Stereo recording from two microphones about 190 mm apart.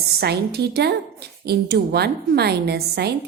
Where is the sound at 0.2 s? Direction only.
60° right (ahead or behind).